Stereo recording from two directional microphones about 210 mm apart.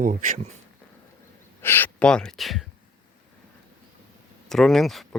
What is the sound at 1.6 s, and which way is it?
Speech, 10° left (ahead or behind).